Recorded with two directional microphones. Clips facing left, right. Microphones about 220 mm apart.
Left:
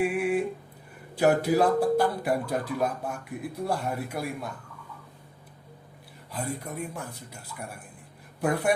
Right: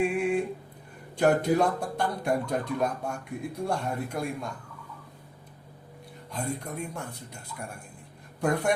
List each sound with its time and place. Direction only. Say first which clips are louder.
0.0 s speech: even; 5° left (ahead or behind)
6.3 s speech: even; 5° left (ahead or behind)
8.4 s speech: even; 5° left (ahead or behind)